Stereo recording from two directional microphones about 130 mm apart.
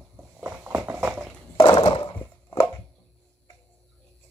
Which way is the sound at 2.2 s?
20° left (ahead or behind).